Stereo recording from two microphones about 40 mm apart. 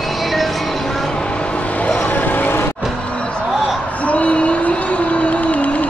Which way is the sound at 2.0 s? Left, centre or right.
Left.